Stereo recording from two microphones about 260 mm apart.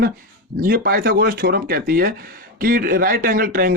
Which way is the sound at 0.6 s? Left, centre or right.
Right.